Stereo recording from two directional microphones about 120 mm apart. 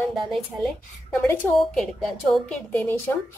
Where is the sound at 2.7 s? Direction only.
15° left (ahead or behind).